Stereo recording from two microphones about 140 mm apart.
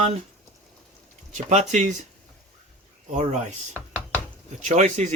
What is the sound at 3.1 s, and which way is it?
Speech, 55° right (ahead or behind).